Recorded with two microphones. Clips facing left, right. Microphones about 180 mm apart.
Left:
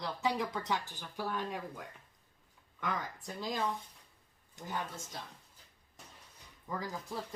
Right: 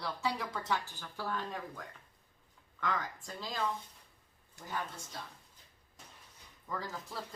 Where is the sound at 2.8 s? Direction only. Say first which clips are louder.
Right 1 dB; 15° left (ahead or behind).